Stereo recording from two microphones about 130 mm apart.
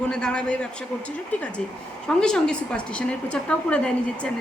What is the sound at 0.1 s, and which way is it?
Speech, 5° left (ahead or behind).